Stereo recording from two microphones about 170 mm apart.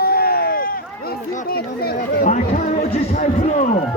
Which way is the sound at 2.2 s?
45° left (ahead or behind).